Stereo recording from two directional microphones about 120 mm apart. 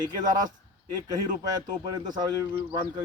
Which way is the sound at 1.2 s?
35° right (ahead or behind).